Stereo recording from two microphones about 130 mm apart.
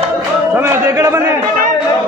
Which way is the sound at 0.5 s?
20° right (ahead or behind).